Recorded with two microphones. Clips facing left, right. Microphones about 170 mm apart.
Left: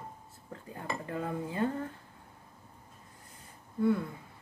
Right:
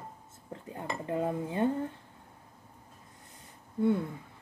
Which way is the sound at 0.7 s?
20° right (ahead or behind).